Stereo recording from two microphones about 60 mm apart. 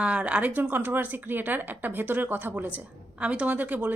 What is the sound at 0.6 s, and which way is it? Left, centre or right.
A woman's voice, right.